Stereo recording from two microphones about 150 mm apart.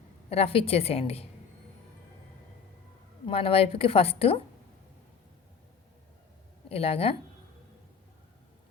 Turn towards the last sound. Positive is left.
turn(degrees=40)  # may be behind; listen again after turning